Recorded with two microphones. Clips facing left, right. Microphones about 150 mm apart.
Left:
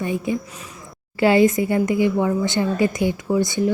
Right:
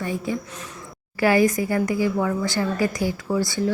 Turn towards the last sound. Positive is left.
turn(degrees=20)  # may be behind; listen again after turning